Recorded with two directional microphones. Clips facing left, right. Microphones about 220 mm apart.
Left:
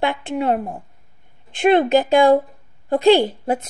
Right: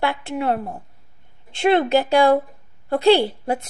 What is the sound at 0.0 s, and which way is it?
A woman's voice, 20° left (ahead or behind).